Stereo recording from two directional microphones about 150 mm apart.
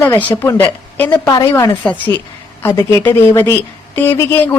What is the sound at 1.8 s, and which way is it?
A woman's voice, 10° left (ahead or behind).